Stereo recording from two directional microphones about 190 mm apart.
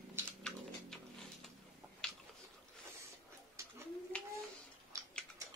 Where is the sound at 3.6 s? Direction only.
15° right (ahead or behind).